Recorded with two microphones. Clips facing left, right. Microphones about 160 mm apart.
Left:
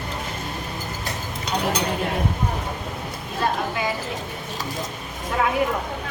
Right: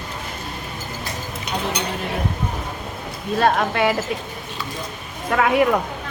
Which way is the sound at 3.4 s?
70° right (ahead or behind).